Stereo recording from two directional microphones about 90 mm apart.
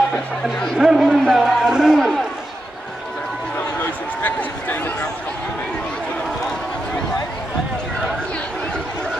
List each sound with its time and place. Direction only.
0.4 s speech: 5° left (ahead or behind)
0.7 s speech: 5° right (ahead or behind)
1.0 s speech: 5° left (ahead or behind)
1.3 s speech: 5° right (ahead or behind)
2.0 s speech: 5° left (ahead or behind)
4.2 s a sound: 20° left (ahead or behind)